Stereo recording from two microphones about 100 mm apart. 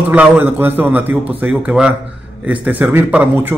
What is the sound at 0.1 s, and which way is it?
A man's voice, 20° right (ahead or behind).